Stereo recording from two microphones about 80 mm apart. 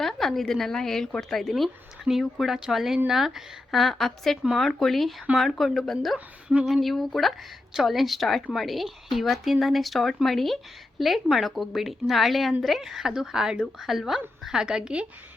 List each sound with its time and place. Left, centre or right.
0.0 s a woman's voice: centre
6.1 s speech: centre
6.7 s a woman's voice: centre